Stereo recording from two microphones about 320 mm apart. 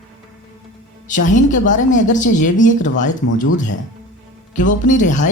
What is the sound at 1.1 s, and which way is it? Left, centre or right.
Speech, left.